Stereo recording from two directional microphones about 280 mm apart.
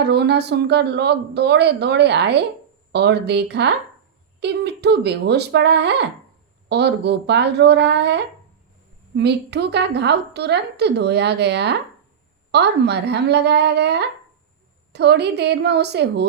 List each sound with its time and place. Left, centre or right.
0.0 s a woman's voice: right